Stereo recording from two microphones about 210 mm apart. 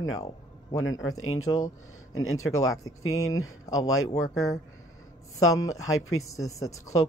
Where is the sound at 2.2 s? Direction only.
80° left.